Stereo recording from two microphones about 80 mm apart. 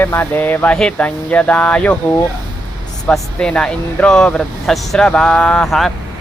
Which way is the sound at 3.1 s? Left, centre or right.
Centre.